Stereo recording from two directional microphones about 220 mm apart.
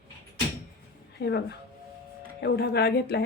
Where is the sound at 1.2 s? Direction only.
50° left (ahead or behind).